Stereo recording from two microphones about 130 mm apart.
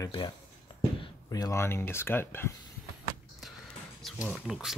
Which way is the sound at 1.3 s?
25° left (ahead or behind).